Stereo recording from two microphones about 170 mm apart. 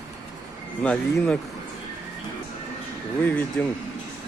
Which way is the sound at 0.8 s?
5° left (ahead or behind).